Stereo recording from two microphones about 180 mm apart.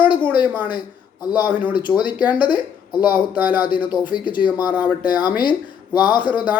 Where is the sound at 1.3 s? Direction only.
10° right (ahead or behind).